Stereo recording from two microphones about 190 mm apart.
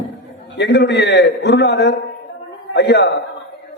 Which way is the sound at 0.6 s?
65° left (ahead or behind).